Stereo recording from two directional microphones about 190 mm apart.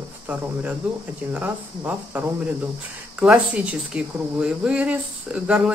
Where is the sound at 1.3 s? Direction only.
10° right (ahead or behind).